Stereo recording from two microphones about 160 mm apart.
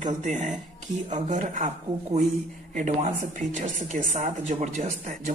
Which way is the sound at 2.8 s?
50° right (ahead or behind).